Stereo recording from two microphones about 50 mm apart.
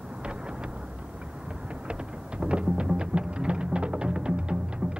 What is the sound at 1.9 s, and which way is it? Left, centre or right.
Music, right.